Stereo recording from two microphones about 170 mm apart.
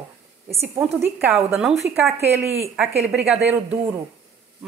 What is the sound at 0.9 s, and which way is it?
Speech, 15° right (ahead or behind).